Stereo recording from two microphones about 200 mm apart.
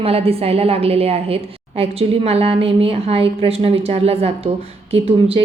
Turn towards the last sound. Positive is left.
turn(degrees=-30)  # may be behind; listen again after turning